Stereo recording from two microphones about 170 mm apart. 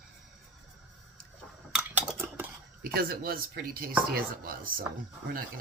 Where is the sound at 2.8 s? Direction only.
60° right (ahead or behind).